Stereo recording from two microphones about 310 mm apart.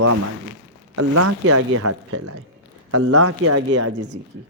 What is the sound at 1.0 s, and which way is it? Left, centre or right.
A man's voice, right.